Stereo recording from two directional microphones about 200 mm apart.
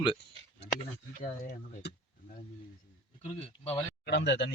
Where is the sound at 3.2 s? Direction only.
30° left (ahead or behind).